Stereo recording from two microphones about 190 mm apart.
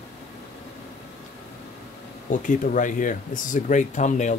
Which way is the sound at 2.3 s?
45° left (ahead or behind).